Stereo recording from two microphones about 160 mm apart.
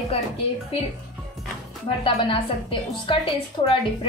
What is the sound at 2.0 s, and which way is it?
A woman's voice, 35° left (ahead or behind).